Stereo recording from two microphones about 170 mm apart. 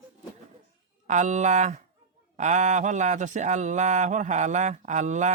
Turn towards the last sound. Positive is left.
turn(degrees=-45)  # may be behind; listen again after turning